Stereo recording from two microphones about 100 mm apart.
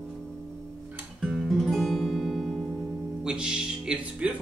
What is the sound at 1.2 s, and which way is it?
Guitar, centre (ahead or behind).